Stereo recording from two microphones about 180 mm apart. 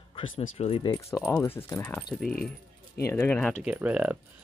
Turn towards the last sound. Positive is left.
turn(degrees=-10)  # may be behind; listen again after turning